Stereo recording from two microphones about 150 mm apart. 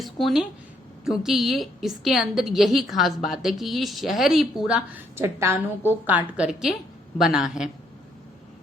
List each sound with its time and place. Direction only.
0.0 s a sound: centre (ahead or behind)
1.0 s a woman's voice: 5° right (ahead or behind)
5.1 s a woman's voice: 15° right (ahead or behind)